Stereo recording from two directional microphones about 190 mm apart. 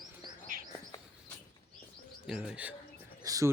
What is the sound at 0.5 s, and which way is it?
Bird, 50° right (ahead or behind).